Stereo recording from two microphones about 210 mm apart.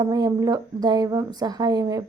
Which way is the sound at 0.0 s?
20° right (ahead or behind).